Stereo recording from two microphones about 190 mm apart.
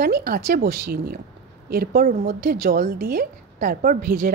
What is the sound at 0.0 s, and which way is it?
A woman's voice, 50° right (ahead or behind).